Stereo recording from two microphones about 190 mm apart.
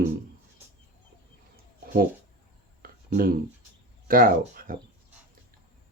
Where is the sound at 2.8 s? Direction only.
50° right (ahead or behind).